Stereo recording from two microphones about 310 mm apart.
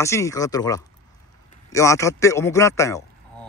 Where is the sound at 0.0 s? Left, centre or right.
Centre.